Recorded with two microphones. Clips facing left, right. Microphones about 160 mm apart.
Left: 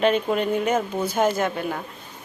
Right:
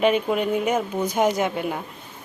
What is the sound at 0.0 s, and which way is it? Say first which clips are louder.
A woman's voice: even; 10° right (ahead or behind).